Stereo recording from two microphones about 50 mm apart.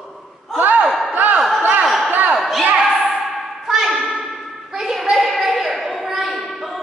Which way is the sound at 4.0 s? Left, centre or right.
Centre.